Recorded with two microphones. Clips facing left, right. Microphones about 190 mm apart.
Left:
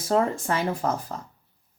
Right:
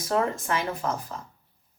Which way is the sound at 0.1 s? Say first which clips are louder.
Left 3 dB; 30° left (ahead or behind).